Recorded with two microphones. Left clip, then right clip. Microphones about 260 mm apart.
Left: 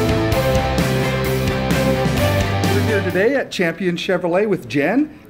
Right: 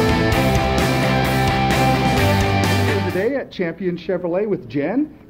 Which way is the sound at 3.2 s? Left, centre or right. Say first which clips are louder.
Left 4 dB; left.